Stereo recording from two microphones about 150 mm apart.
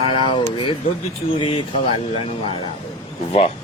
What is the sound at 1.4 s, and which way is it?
Speech, 35° left (ahead or behind).